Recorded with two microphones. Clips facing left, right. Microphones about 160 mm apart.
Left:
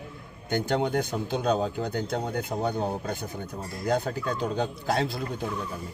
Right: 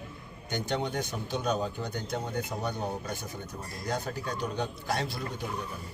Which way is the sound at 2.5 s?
55° left (ahead or behind).